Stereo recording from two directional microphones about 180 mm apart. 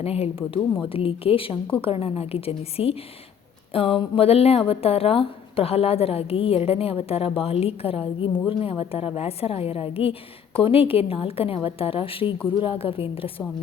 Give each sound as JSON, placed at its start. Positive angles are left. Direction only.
{"t": 0.0, "sound": "speech", "side_deg": 35}